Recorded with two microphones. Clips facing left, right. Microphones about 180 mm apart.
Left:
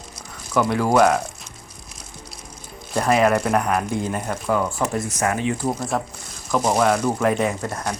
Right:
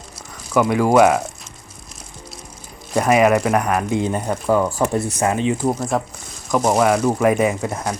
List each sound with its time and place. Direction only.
0.5 s speech: 10° right (ahead or behind)
2.9 s speech: 5° right (ahead or behind)
4.1 s speech: 30° right (ahead or behind)
5.9 s speech: centre (ahead or behind)